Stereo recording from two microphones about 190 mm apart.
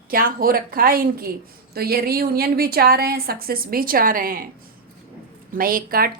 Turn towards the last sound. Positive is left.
turn(degrees=-50)  # may be behind; listen again after turning